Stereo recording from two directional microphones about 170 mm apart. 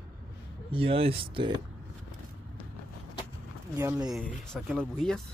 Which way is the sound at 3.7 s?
10° right (ahead or behind).